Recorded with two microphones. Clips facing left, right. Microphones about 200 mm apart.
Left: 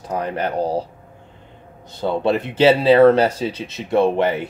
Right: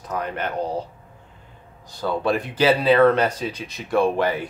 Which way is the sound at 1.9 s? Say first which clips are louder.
Left 3 dB; 25° left (ahead or behind).